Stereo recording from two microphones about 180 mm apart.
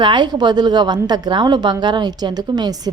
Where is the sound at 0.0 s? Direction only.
25° right (ahead or behind).